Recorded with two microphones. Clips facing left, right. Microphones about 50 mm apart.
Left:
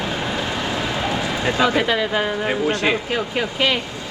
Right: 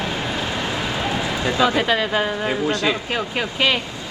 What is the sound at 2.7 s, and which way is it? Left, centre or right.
Speech, left.